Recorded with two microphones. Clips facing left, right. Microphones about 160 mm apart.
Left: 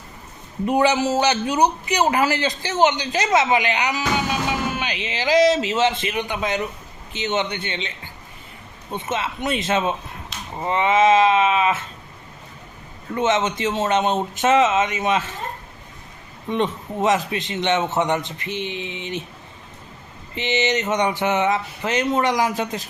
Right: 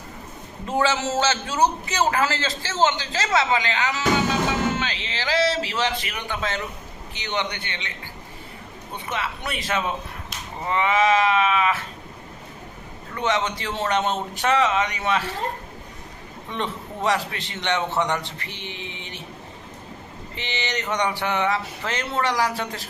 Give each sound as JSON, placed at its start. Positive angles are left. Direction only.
{"t": 0.7, "sound": "a man's voice", "side_deg": 15}
{"t": 13.1, "sound": "a man's voice", "side_deg": 20}
{"t": 16.5, "sound": "a man's voice", "side_deg": 20}
{"t": 20.3, "sound": "a man's voice", "side_deg": 20}